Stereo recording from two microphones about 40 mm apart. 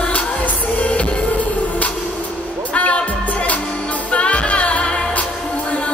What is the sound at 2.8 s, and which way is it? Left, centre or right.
Music, left.